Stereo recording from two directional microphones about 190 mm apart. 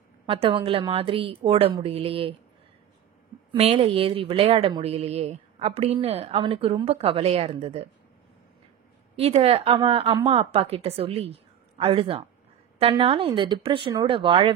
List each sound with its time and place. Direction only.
0.3 s a woman's voice: 30° right (ahead or behind)
3.5 s speech: 30° right (ahead or behind)
9.1 s a woman's voice: 30° right (ahead or behind)